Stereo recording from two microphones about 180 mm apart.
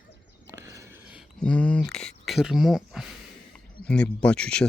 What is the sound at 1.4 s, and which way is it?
Speech, 5° left (ahead or behind).